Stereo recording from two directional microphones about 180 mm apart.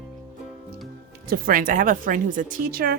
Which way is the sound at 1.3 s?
50° right (ahead or behind).